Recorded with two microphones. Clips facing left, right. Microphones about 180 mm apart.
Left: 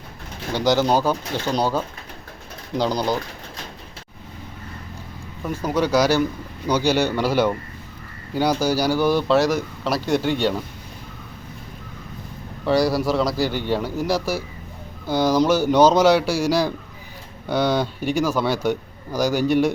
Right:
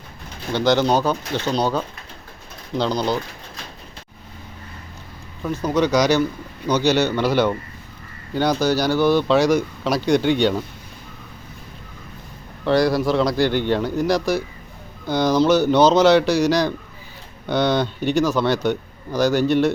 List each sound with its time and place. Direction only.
0.5 s speech: 10° left (ahead or behind)
5.4 s speech: 10° left (ahead or behind)
12.6 s speech: 5° left (ahead or behind)